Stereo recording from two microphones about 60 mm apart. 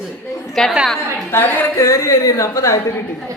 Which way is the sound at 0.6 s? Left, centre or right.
Centre.